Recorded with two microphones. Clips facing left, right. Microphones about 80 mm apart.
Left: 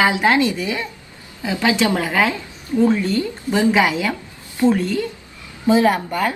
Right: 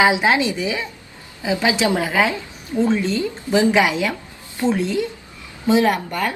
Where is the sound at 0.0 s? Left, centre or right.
Centre.